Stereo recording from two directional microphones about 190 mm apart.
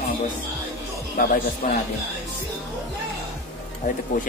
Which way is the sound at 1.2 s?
50° left (ahead or behind).